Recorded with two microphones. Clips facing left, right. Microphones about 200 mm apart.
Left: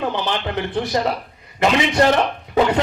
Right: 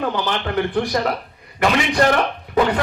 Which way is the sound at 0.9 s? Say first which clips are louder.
Even; 20° left (ahead or behind).